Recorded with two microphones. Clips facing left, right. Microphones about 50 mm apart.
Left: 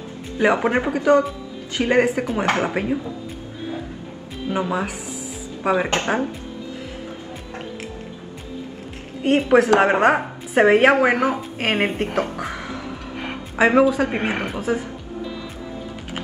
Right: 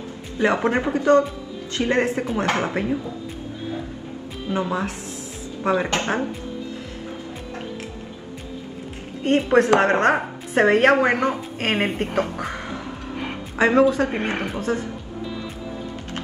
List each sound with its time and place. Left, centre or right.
0.4 s speech: centre
2.4 s speech: left
2.7 s speech: centre
4.5 s speech: centre
9.4 s a woman's voice: centre